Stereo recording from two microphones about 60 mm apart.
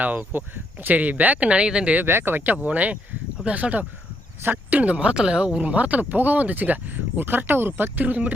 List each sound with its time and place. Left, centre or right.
0.0 s speech: right
2.0 s speech: right